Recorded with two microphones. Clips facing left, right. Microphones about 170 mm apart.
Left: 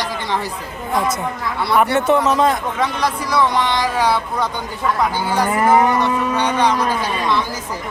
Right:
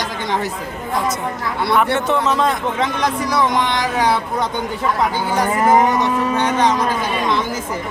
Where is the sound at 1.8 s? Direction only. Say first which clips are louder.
Left 6 dB; 10° left (ahead or behind).